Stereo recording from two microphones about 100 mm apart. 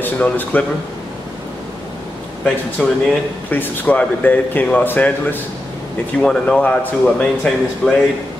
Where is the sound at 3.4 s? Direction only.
20° left (ahead or behind).